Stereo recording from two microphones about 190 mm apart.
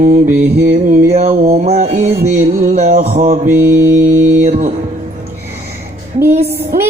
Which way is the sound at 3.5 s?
10° right (ahead or behind).